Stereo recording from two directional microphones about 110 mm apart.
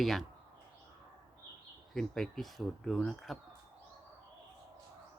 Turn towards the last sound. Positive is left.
turn(degrees=0)  # may be behind; listen again after turning